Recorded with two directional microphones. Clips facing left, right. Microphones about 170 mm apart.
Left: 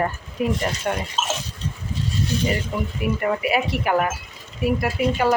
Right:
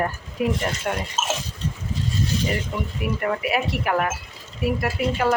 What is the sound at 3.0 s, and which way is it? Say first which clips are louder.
Speech: left 2 dB; centre (ahead or behind).